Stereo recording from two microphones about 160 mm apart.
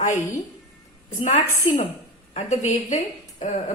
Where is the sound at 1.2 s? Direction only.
50° left (ahead or behind).